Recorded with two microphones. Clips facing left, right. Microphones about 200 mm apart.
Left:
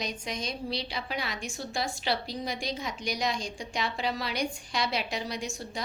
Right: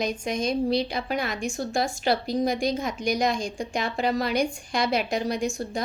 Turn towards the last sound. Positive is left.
turn(degrees=-50)  # may be behind; listen again after turning